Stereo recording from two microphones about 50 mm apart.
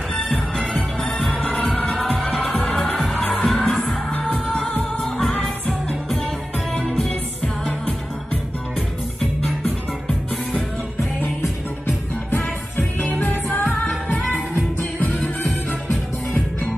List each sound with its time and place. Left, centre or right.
0.1 s music: left
1.6 s music: left
2.7 s music: centre
4.5 s music: left
5.0 s music: centre
7.1 s music: left
12.3 s music: left